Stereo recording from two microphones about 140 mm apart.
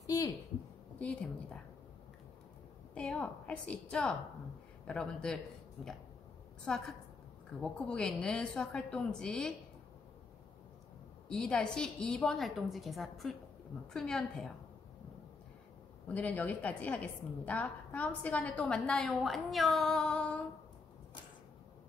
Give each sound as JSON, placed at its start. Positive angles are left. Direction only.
{"t": 0.0, "sound": "a sound", "side_deg": 25}
{"t": 0.9, "sound": "a woman's voice", "side_deg": 10}
{"t": 2.9, "sound": "a woman's voice", "side_deg": 10}
{"t": 7.6, "sound": "a woman's voice", "side_deg": 5}
{"t": 11.2, "sound": "a woman's voice", "side_deg": 5}
{"t": 16.1, "sound": "a woman's voice", "side_deg": 10}